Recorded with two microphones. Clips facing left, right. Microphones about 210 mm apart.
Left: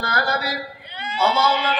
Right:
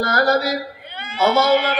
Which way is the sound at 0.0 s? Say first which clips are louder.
Right 7 dB; 45° right (ahead or behind).